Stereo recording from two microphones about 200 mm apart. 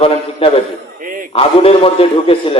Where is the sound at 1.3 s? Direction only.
30° left (ahead or behind).